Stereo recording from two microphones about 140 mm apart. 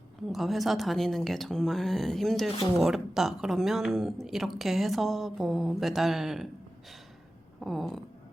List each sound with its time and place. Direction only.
0.3 s speech: centre (ahead or behind)
2.6 s a woman's voice: 25° left (ahead or behind)
2.8 s speech: centre (ahead or behind)
7.6 s speech: centre (ahead or behind)